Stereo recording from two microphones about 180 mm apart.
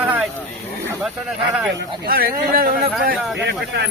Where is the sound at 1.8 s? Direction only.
55° right (ahead or behind).